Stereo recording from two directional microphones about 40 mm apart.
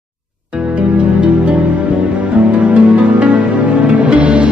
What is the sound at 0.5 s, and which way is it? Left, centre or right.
Music, right.